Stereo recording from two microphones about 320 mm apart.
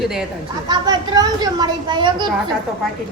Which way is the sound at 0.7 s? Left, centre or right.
Centre.